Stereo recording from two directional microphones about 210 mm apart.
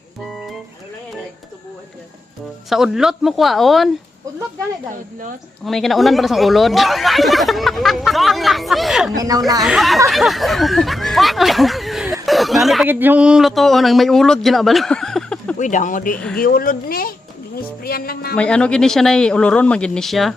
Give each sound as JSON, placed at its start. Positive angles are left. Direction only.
{"t": 2.6, "sound": "speech", "side_deg": 0}
{"t": 5.6, "sound": "speech", "side_deg": 0}
{"t": 9.1, "sound": "speech", "side_deg": -15}
{"t": 9.6, "sound": "speech", "side_deg": 0}
{"t": 15.5, "sound": "speech", "side_deg": 35}
{"t": 16.1, "sound": "speech", "side_deg": 5}
{"t": 16.4, "sound": "speech", "side_deg": 45}
{"t": 18.3, "sound": "speech", "side_deg": 5}